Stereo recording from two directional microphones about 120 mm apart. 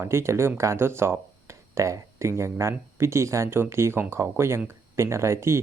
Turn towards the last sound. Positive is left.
turn(degrees=-20)  # may be behind; listen again after turning